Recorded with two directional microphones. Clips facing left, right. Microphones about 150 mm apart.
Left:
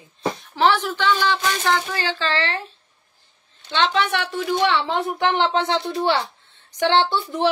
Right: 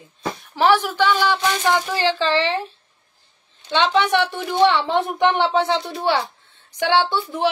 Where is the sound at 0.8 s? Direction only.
10° right (ahead or behind).